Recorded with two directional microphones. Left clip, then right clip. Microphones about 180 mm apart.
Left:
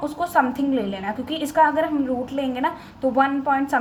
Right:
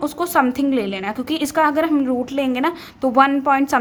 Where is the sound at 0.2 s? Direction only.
40° right (ahead or behind).